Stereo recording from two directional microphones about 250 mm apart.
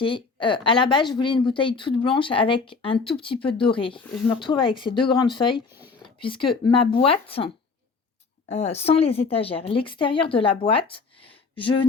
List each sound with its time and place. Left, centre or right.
0.0 s speech: centre